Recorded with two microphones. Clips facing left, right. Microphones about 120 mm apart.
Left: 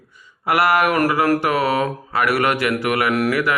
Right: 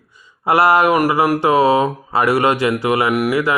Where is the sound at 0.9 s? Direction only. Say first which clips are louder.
Right 2 dB; 15° right (ahead or behind).